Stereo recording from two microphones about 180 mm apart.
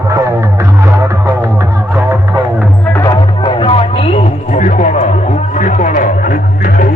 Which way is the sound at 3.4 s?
30° left (ahead or behind).